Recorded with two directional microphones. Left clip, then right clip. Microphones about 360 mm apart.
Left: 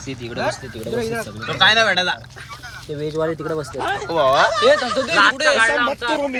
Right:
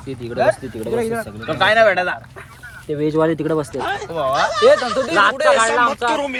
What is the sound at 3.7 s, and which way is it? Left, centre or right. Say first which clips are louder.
Speech: even; centre.